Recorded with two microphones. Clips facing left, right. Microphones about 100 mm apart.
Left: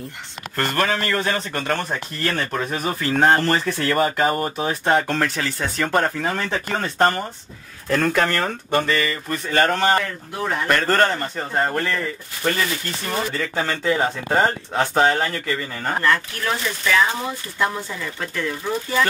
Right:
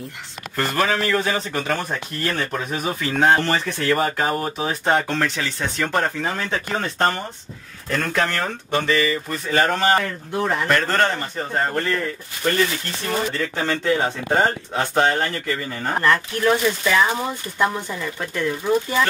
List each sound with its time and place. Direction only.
0.6 s speech: centre (ahead or behind)
13.6 s speech: centre (ahead or behind)
16.0 s speech: 20° right (ahead or behind)